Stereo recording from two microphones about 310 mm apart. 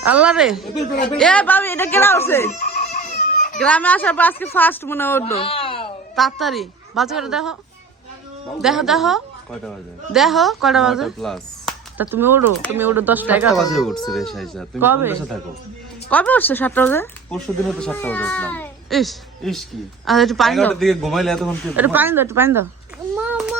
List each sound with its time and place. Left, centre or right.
0.0 s a woman's voice: centre
0.7 s speech: left
1.1 s speech: centre
2.5 s chicken: left
3.6 s a woman's voice: centre
5.2 s speech: centre
6.1 s a woman's voice: centre
8.6 s a woman's voice: centre
16.0 s a woman's voice: centre
23.1 s a sound: centre